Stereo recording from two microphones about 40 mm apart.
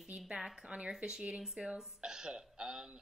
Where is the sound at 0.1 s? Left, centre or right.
Right.